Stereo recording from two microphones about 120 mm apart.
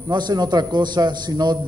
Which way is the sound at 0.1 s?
35° right (ahead or behind).